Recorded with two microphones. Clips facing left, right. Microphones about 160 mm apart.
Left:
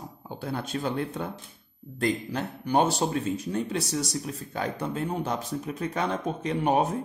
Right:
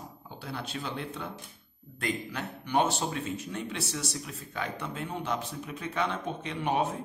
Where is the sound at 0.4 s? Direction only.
45° left (ahead or behind).